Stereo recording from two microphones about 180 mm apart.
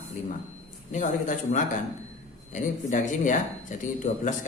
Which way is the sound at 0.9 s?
45° left (ahead or behind).